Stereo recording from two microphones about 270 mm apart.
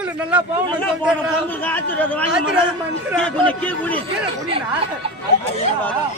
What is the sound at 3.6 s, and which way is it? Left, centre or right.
Speech, centre.